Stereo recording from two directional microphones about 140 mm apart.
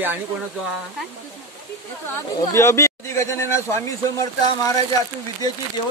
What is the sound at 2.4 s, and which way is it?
Speech, 20° left (ahead or behind).